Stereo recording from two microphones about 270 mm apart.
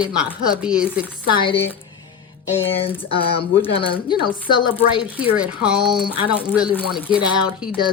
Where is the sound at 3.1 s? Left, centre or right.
Centre.